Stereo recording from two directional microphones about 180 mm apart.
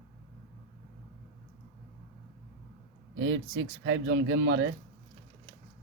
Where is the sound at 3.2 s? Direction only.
90° right.